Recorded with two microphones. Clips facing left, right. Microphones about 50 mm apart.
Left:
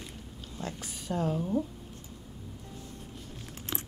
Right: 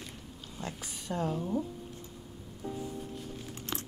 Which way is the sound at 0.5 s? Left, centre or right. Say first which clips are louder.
Left 2 dB; centre.